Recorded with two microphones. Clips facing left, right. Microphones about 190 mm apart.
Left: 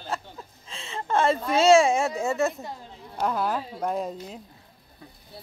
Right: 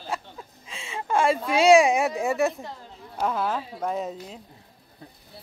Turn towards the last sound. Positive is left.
turn(degrees=0)  # may be behind; listen again after turning